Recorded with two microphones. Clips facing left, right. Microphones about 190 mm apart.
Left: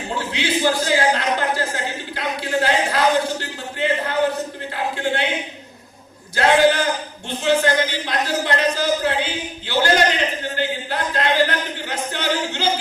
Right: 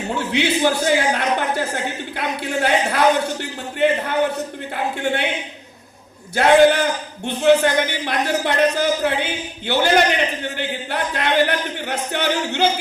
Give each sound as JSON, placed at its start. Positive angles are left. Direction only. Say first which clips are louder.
{"t": 0.2, "sound": "a man's voice", "louder": "right 3 dB", "side_deg": -60}
{"t": 4.7, "sound": "a man's voice", "louder": "right 1 dB", "side_deg": -55}
{"t": 6.3, "sound": "a man's voice", "louder": "right 3 dB", "side_deg": -60}